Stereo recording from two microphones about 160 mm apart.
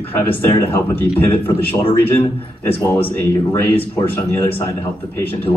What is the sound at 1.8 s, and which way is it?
Speech, 35° left (ahead or behind).